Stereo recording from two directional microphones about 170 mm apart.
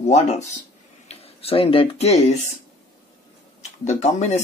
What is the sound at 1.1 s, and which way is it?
Speech, 35° left (ahead or behind).